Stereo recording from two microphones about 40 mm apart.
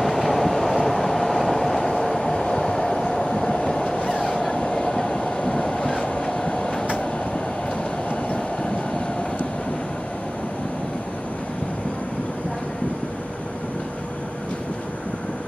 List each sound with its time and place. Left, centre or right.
0.0 s train: centre; by 6.7 s left